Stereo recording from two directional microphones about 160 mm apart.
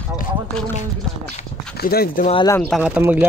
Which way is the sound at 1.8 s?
70° left (ahead or behind).